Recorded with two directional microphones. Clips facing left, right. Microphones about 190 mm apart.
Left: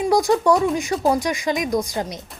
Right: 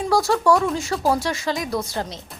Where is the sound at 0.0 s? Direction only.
15° left (ahead or behind).